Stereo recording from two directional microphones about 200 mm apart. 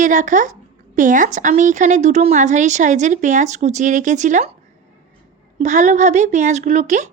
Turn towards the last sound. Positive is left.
turn(degrees=-35)  # may be behind; listen again after turning